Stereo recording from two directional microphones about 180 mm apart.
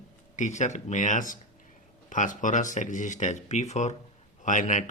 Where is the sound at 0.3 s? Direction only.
40° left (ahead or behind).